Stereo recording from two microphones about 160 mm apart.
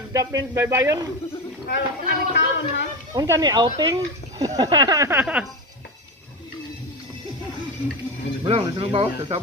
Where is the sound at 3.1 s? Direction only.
25° right (ahead or behind).